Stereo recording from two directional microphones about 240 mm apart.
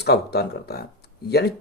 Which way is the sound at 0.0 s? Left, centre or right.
Left.